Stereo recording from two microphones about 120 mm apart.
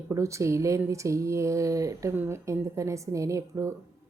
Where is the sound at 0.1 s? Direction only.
25° right (ahead or behind).